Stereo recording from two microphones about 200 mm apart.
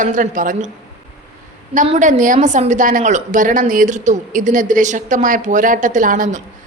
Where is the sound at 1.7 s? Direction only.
35° right (ahead or behind).